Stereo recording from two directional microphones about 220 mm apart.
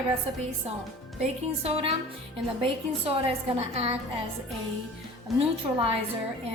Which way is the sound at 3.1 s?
25° right (ahead or behind).